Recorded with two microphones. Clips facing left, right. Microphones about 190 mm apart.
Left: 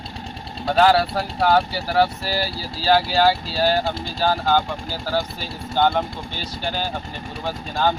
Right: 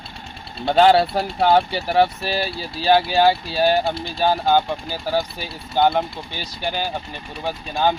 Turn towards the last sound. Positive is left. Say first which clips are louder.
# right 1 dB
turn(degrees=-15)  # may be behind; listen again after turning